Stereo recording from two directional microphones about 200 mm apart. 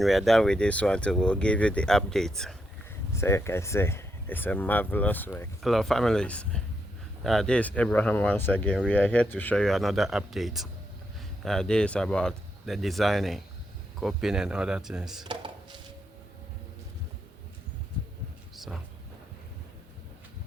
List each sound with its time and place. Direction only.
0.0 s speech: centre (ahead or behind)
3.1 s speech: 15° left (ahead or behind); by 15.2 s centre (ahead or behind)
15.2 s dishes: 25° right (ahead or behind)
18.5 s a sound: centre (ahead or behind)